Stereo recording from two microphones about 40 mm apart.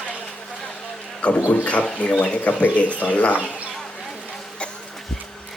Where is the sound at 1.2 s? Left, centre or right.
Left.